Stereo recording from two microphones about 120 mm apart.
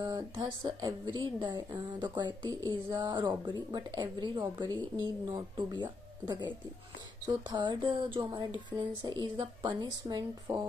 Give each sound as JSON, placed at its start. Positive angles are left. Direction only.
{"t": 0.0, "sound": "speech", "side_deg": -35}